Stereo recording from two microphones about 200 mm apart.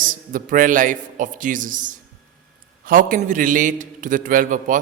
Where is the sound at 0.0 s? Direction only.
40° right (ahead or behind).